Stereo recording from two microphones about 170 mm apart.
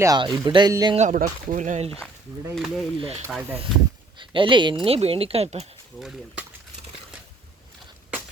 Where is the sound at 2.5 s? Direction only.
Centre (ahead or behind).